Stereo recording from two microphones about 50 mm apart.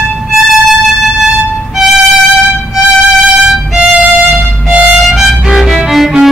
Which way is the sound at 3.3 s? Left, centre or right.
Centre.